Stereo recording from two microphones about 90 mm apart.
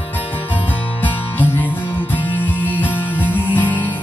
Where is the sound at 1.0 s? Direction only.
20° left (ahead or behind).